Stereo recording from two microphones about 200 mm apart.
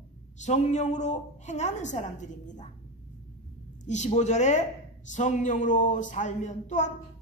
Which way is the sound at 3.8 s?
35° left (ahead or behind).